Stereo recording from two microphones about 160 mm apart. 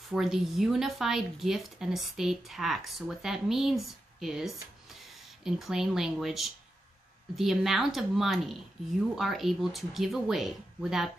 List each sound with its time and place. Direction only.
0.1 s speech: centre (ahead or behind)